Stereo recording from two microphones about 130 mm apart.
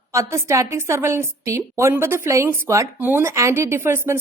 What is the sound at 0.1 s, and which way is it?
A woman's voice, 25° right (ahead or behind).